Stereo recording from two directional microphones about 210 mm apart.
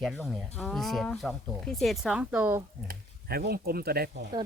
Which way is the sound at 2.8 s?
45° right (ahead or behind).